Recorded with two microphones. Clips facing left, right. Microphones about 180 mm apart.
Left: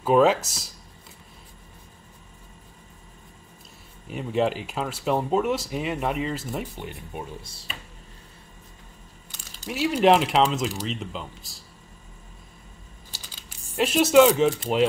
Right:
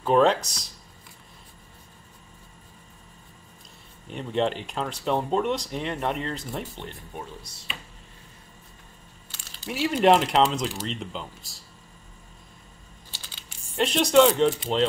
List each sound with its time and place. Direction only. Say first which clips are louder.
0.0 s speech: left 1 dB; 5° left (ahead or behind)
4.1 s speech: left 2 dB; 5° left (ahead or behind)
7.4 s speech: left 1 dB; 30° left (ahead or behind)
9.7 s speech: left 1 dB; centre (ahead or behind)
13.7 s speech: left 2 dB; 5° left (ahead or behind)